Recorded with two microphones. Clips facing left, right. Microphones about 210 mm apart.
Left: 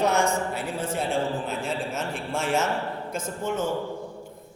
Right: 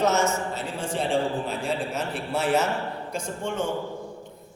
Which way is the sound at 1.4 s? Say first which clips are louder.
Right 1 dB; centre (ahead or behind).